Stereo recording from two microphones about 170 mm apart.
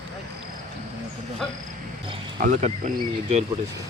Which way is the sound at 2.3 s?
50° right (ahead or behind).